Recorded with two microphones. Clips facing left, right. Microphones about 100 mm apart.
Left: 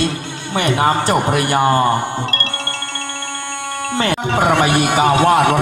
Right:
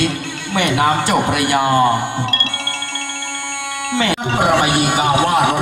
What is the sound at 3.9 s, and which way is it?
Music, 40° left (ahead or behind).